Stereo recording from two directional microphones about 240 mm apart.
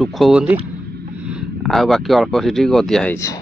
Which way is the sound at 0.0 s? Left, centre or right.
Centre.